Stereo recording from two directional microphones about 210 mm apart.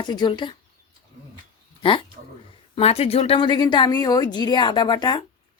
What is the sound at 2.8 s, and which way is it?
Speech, 30° left (ahead or behind).